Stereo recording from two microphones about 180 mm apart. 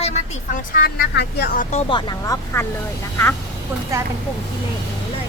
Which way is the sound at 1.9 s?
25° left (ahead or behind).